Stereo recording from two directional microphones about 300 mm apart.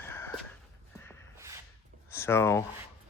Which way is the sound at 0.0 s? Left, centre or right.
Centre.